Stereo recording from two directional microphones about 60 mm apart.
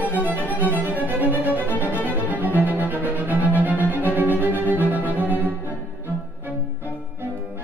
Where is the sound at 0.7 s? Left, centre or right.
Right.